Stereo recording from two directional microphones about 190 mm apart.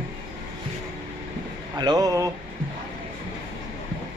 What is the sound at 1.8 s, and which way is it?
Speech, 20° right (ahead or behind).